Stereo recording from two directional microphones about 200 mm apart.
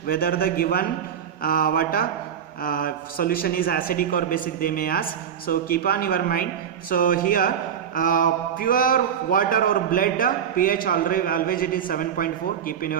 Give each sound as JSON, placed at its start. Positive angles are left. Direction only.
{"t": 0.1, "sound": "a man's voice", "side_deg": 45}